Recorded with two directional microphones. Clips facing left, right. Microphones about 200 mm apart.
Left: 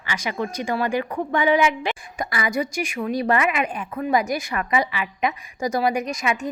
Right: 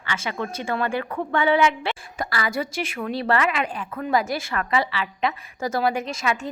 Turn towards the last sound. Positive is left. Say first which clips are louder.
# left 1 dB
turn(degrees=15)  # may be behind; listen again after turning